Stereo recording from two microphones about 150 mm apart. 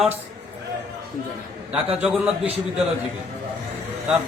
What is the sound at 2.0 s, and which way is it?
Speech, 5° right (ahead or behind).